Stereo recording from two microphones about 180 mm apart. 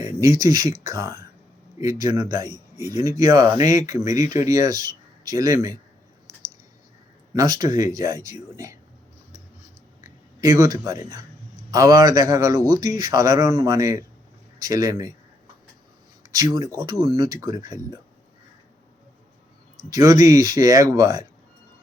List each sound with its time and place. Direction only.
0.0 s speech: 20° right (ahead or behind)
7.3 s speech: 20° right (ahead or behind)
10.4 s speech: 20° right (ahead or behind)
16.3 s speech: 20° right (ahead or behind)
19.9 s speech: 20° right (ahead or behind)